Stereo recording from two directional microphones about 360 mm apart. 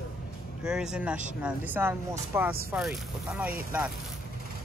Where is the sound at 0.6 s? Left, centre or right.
Centre.